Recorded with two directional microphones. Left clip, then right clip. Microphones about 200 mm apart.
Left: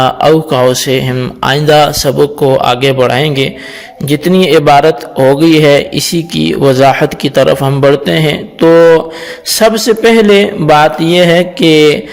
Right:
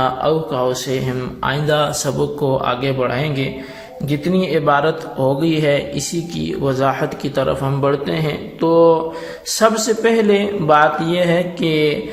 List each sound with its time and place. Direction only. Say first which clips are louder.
0.0 s a man's voice: left 9 dB; 50° left (ahead or behind)